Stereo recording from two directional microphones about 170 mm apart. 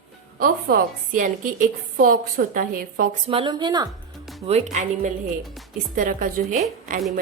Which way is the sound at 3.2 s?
30° right (ahead or behind).